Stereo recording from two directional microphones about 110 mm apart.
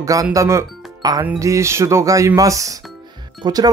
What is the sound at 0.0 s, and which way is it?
Speech, 30° right (ahead or behind).